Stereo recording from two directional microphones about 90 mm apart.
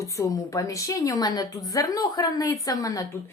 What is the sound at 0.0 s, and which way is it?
A woman's voice, 35° left (ahead or behind).